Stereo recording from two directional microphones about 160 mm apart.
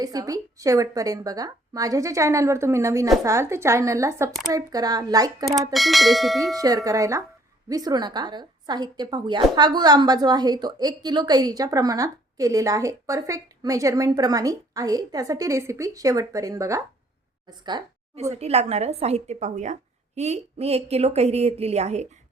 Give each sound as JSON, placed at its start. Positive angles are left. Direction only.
{"t": 0.0, "sound": "a woman's voice", "side_deg": -25}
{"t": 5.7, "sound": "bell", "side_deg": 0}
{"t": 6.6, "sound": "a woman's voice", "side_deg": -20}
{"t": 17.7, "sound": "a sound", "side_deg": -30}
{"t": 18.2, "sound": "a woman's voice", "side_deg": -40}